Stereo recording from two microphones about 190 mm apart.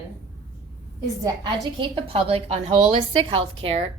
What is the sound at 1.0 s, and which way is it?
A woman's voice, 20° right (ahead or behind).